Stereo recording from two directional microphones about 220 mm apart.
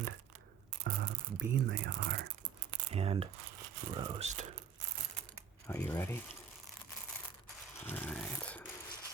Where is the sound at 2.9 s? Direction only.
25° right (ahead or behind).